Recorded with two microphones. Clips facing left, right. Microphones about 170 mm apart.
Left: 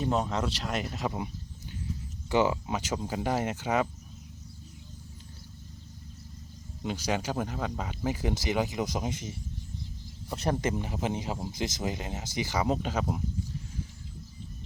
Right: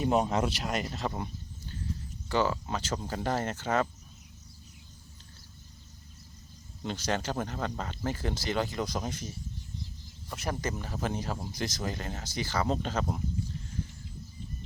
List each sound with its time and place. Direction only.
0.0 s speech: 10° right (ahead or behind)
0.7 s speech: centre (ahead or behind)
2.3 s speech: 15° left (ahead or behind)
6.8 s speech: 10° left (ahead or behind)
10.3 s speech: 30° left (ahead or behind); by 13.2 s 5° left (ahead or behind)